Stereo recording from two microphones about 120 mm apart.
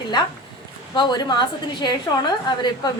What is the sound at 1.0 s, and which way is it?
A woman's voice, 35° left (ahead or behind).